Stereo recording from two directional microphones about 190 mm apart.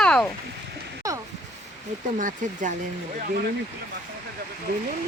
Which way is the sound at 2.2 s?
45° right (ahead or behind).